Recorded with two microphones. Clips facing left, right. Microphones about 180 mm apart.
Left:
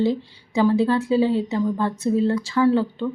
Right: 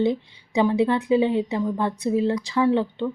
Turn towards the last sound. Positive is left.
turn(degrees=-20)  # may be behind; listen again after turning